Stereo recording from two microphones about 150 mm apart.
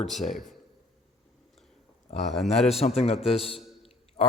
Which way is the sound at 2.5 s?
45° left (ahead or behind).